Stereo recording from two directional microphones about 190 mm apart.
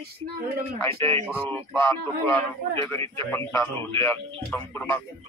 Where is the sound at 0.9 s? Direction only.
30° right (ahead or behind).